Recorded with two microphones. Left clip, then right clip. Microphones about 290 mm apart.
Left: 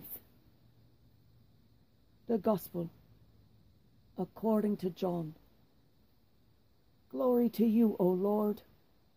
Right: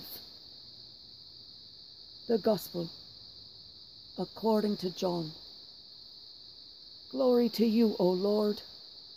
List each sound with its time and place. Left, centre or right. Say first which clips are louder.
2.2 s speech: right 3 dB; right
4.2 s speech: right 3 dB; right
7.1 s speech: right 3 dB; centre